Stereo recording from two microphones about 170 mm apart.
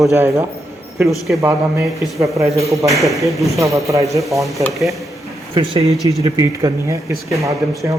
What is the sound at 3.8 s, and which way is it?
Speech, 20° right (ahead or behind).